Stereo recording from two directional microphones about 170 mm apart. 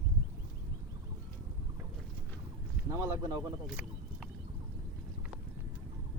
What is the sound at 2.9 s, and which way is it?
Speech, 20° right (ahead or behind).